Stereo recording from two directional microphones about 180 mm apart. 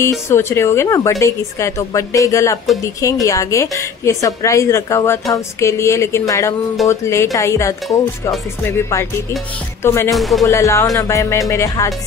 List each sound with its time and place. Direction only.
0.0 s a woman's voice: 15° left (ahead or behind)
10.1 s music: centre (ahead or behind)
10.4 s a woman's voice: 15° left (ahead or behind)